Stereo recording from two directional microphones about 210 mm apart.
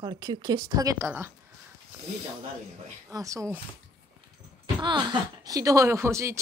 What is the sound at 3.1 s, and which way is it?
Speech, 15° right (ahead or behind).